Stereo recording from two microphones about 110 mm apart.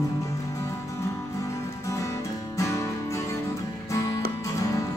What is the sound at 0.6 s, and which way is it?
Music, 25° left (ahead or behind).